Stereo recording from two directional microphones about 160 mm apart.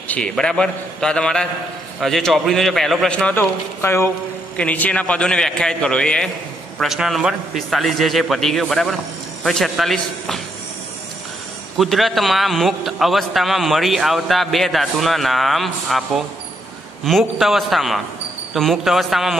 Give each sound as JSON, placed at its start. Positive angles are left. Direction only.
{"t": 0.1, "sound": "a man's voice", "side_deg": 5}
{"t": 11.8, "sound": "a man's voice", "side_deg": 0}